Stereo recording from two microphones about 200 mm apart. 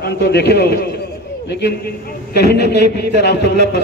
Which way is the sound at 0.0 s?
55° left (ahead or behind).